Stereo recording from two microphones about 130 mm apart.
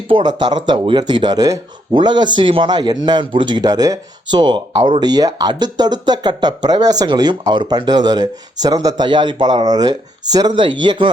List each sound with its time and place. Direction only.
0.1 s speech: 35° right (ahead or behind)